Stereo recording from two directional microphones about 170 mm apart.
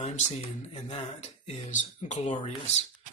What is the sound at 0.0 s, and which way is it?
Speech, 40° left (ahead or behind).